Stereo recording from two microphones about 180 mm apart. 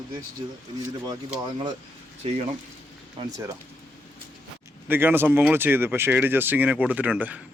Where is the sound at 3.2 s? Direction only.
30° right (ahead or behind).